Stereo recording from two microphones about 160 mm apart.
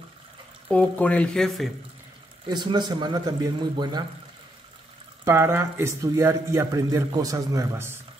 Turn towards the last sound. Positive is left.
turn(degrees=-20)  # may be behind; listen again after turning